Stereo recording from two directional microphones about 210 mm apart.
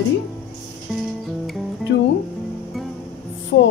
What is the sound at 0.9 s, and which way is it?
Music, 5° right (ahead or behind).